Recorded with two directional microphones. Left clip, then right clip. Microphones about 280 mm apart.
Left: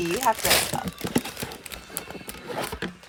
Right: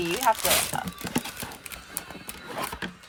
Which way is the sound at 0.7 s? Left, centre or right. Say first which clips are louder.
Left 2 dB; left.